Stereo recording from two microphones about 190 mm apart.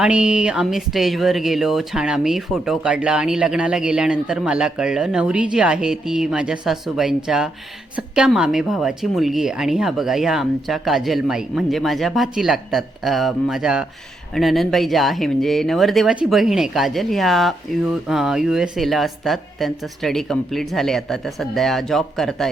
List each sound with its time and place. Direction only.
0.0 s speech: 5° right (ahead or behind)